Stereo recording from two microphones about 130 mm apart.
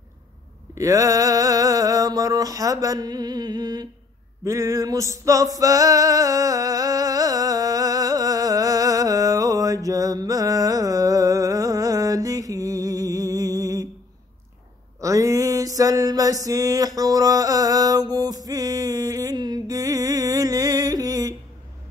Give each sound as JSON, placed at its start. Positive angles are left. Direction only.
{"t": 0.7, "sound": "a sound", "side_deg": -25}
{"t": 4.5, "sound": "male singing", "side_deg": -25}
{"t": 15.0, "sound": "music", "side_deg": -25}